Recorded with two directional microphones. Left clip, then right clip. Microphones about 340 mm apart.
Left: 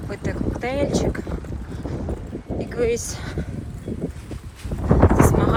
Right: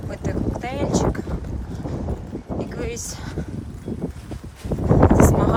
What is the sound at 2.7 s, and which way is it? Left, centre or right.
Speech, centre.